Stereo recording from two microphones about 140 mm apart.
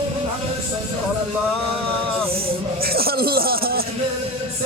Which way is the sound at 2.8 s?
90° right.